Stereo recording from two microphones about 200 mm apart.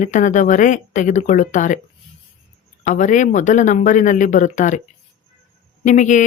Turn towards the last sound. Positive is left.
turn(degrees=40)  # may be behind; listen again after turning